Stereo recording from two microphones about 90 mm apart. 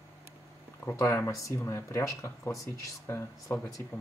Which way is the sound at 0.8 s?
30° left (ahead or behind).